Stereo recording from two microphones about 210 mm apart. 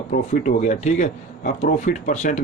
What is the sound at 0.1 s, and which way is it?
Speech, 35° left (ahead or behind).